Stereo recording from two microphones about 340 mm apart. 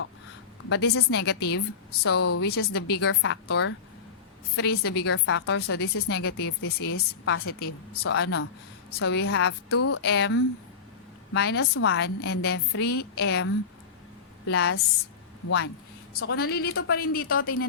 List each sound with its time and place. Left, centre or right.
0.7 s a woman's voice: left
10.0 s a woman's voice: left